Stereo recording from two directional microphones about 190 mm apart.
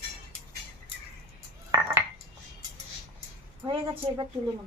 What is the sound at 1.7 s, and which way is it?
Dishes, 15° right (ahead or behind).